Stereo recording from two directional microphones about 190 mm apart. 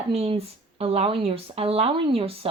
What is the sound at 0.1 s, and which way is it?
Speech, 30° right (ahead or behind).